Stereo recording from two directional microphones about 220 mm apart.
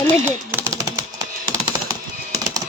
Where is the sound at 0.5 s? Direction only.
15° right (ahead or behind).